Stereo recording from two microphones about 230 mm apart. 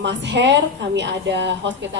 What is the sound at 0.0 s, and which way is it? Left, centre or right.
A woman's voice, right.